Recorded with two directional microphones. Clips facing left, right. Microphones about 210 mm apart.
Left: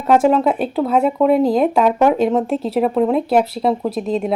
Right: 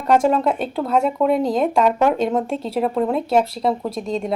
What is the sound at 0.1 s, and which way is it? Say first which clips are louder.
A woman's voice: left 3 dB; 5° left (ahead or behind).